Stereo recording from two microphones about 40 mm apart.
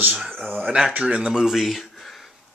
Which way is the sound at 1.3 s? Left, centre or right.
Centre.